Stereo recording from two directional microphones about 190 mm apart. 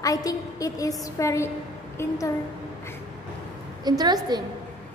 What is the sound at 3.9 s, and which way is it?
Speech, 20° right (ahead or behind).